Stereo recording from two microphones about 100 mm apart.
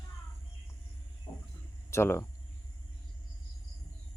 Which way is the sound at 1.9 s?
25° left (ahead or behind).